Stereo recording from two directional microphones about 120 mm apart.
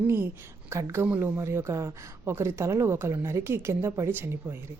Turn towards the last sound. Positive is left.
turn(degrees=-20)  # may be behind; listen again after turning